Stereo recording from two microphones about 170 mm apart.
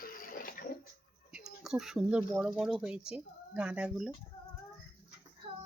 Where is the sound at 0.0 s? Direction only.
55° left (ahead or behind).